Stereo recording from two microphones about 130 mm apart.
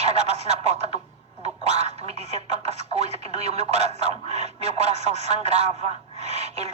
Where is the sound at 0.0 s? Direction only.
55° right (ahead or behind).